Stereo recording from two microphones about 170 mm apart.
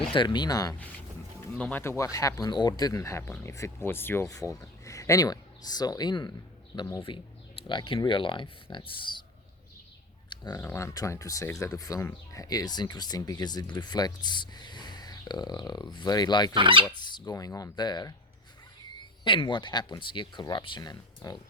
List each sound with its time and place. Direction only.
0.1 s speech: 30° left (ahead or behind)
1.5 s speech: 10° left (ahead or behind); by 9.2 s 30° left (ahead or behind)
10.2 s speech: 25° left (ahead or behind)
16.6 s speech: 30° right (ahead or behind)
16.9 s speech: 25° left (ahead or behind)